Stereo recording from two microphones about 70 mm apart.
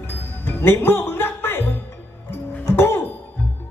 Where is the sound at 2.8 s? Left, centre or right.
Left.